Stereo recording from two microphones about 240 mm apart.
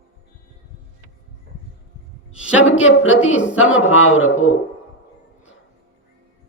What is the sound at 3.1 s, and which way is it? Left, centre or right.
Speech, left.